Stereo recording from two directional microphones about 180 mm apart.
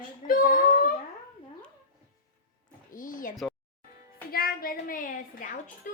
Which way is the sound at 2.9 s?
50° left (ahead or behind).